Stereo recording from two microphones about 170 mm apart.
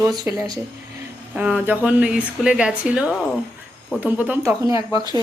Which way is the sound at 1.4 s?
10° right (ahead or behind).